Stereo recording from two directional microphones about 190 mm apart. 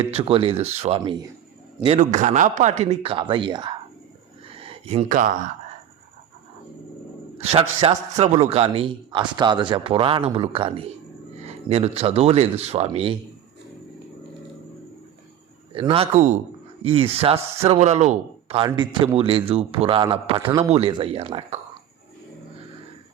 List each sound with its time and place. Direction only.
0.0 s a man's voice: 30° right (ahead or behind)
4.4 s a sound: 30° right (ahead or behind)
7.3 s a man's voice: 30° right (ahead or behind)
15.7 s speech: 30° right (ahead or behind)
20.7 s a man's voice: 30° right (ahead or behind)